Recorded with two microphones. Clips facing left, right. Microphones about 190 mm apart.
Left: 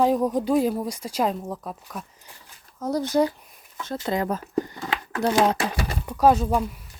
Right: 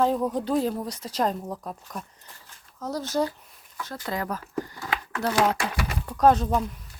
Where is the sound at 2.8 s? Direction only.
15° left (ahead or behind).